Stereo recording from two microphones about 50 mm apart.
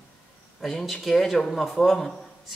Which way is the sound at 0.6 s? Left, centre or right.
Centre.